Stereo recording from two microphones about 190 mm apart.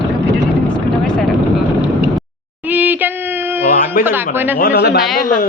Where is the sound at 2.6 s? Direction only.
10° right (ahead or behind).